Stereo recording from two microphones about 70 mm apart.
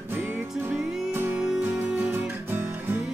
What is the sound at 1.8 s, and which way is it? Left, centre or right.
Music, right.